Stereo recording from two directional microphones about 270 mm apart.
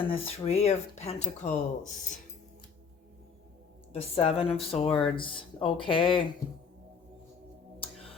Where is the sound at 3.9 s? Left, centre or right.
Left.